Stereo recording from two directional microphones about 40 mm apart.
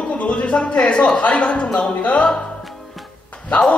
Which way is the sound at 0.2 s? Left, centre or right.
Left.